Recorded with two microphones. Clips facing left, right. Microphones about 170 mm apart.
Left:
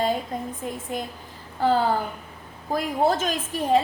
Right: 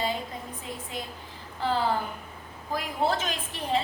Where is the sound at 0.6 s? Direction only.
50° left (ahead or behind).